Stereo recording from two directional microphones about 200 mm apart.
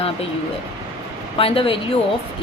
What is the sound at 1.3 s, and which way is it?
Speech, 25° left (ahead or behind).